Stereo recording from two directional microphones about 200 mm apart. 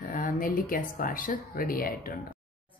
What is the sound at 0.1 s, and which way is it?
Speech, 40° left (ahead or behind).